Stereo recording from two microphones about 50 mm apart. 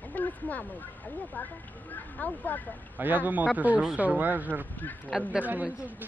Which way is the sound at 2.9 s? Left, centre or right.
Right.